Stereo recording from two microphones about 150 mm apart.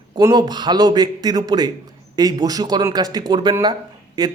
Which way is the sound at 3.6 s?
30° right (ahead or behind).